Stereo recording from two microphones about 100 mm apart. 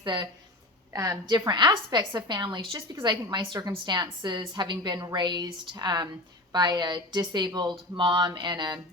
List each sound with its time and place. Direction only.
0.0 s speech: 50° right (ahead or behind)
0.9 s a woman's voice: 35° right (ahead or behind)